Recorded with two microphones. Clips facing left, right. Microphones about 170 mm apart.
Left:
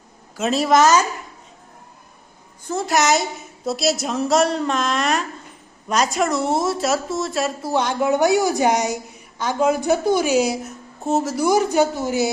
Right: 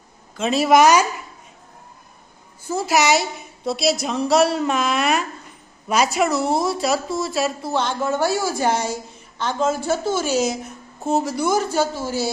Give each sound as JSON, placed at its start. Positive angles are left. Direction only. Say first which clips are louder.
{"t": 0.3, "sound": "speech", "louder": "right 1 dB", "side_deg": 0}
{"t": 2.6, "sound": "a woman's voice", "louder": "even", "side_deg": -5}
{"t": 7.7, "sound": "a woman's voice", "louder": "left 3 dB", "side_deg": 10}
{"t": 11.4, "sound": "a woman's voice", "louder": "left 7 dB", "side_deg": 15}